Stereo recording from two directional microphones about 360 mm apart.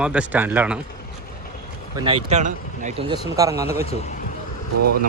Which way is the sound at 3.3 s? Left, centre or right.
Centre.